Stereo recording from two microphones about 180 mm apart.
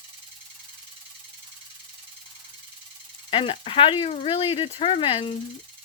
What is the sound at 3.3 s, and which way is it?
Speech, 30° left (ahead or behind).